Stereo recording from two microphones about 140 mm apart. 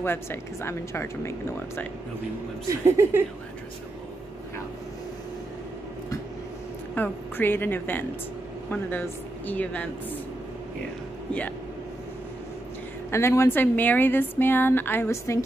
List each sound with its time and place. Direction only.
0.0 s speech: 15° left (ahead or behind)
2.7 s speech: 15° right (ahead or behind)
7.0 s speech: 15° left (ahead or behind)
13.1 s speech: 20° left (ahead or behind)